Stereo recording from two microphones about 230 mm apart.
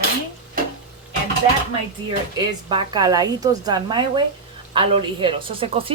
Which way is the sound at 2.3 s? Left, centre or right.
Centre.